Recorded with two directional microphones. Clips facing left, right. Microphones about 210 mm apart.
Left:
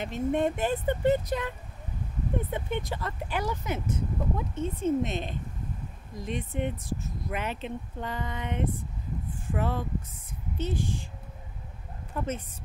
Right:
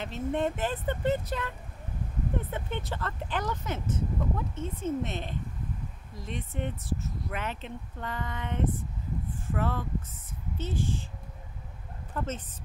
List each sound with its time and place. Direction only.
0.0 s speech: 15° left (ahead or behind)
2.5 s speech: 15° left (ahead or behind)
12.1 s speech: 10° left (ahead or behind)